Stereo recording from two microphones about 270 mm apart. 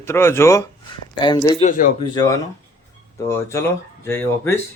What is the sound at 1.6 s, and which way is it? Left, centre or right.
Speech, left.